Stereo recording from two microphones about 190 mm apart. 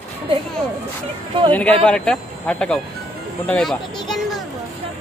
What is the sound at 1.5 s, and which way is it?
Speech, 5° left (ahead or behind).